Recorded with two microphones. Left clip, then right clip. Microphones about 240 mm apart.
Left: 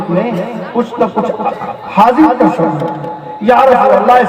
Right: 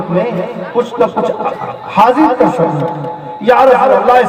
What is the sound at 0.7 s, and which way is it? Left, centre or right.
A man's voice, right.